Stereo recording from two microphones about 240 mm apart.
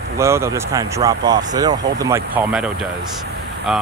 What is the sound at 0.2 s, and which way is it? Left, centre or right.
Speech, centre.